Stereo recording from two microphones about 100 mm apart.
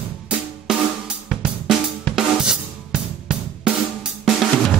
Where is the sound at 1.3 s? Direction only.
Centre (ahead or behind).